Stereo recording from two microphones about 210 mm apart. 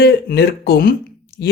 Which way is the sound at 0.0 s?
50° left (ahead or behind).